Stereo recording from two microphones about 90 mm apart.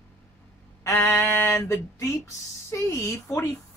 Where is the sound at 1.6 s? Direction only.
30° left (ahead or behind).